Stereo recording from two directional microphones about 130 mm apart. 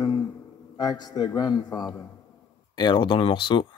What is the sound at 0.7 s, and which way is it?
A man's voice, 30° left (ahead or behind).